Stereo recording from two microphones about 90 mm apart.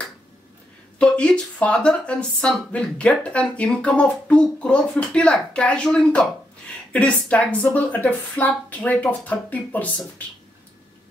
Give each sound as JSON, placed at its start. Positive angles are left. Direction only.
{"t": 0.9, "sound": "a woman's voice", "side_deg": 10}